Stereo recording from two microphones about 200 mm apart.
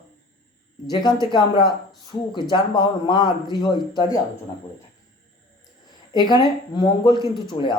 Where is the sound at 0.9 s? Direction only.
20° left (ahead or behind).